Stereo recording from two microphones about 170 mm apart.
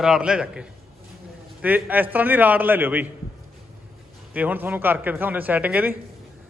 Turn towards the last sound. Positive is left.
turn(degrees=-10)  # may be behind; listen again after turning